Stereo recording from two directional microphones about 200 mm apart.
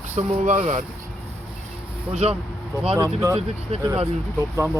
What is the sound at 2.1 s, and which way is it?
Speech, 35° right (ahead or behind).